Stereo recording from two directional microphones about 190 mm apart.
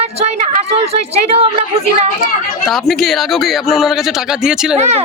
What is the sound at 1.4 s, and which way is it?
Speech, 30° right (ahead or behind).